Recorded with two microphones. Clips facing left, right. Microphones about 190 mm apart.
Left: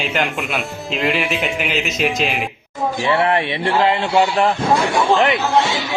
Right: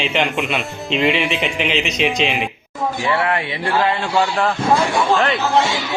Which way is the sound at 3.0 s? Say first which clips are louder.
Left 4 dB; 25° left (ahead or behind).